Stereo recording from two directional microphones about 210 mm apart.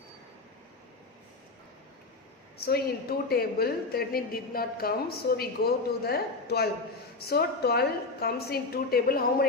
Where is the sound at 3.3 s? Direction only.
45° left (ahead or behind).